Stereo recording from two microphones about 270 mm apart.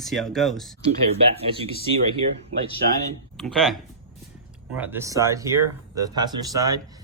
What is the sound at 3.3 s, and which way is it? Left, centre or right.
Speech, centre.